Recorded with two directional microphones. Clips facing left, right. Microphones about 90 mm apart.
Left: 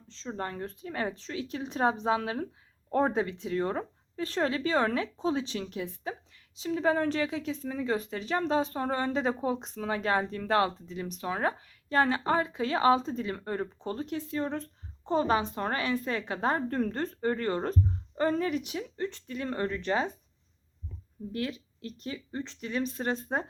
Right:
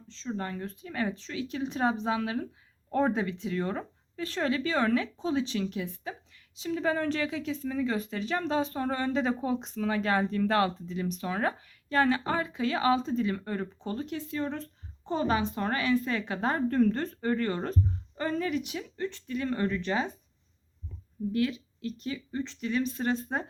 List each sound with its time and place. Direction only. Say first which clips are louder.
0.3 s a woman's voice: right 1 dB; 35° left (ahead or behind)
21.8 s speech: right 3 dB; 35° left (ahead or behind)